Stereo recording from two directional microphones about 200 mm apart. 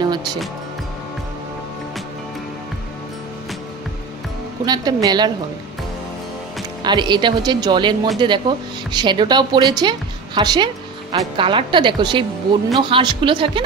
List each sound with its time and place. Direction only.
0.0 s music: 20° right (ahead or behind)
4.6 s speech: 20° right (ahead or behind)
6.8 s speech: 20° right (ahead or behind)